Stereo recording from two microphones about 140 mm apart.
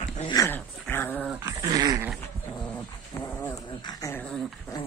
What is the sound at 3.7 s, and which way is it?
Dog, 30° left (ahead or behind).